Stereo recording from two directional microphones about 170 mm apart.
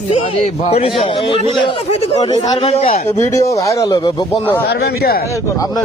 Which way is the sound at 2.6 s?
40° left (ahead or behind).